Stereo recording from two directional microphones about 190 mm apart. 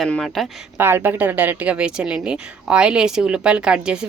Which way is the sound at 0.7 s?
10° right (ahead or behind).